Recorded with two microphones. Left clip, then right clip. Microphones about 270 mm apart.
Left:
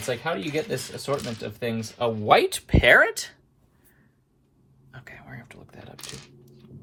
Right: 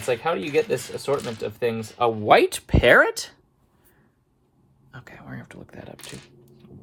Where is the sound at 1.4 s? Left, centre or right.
Right; by 3.3 s centre.